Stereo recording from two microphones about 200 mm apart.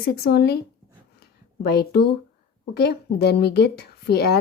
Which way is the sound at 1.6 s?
55° left (ahead or behind).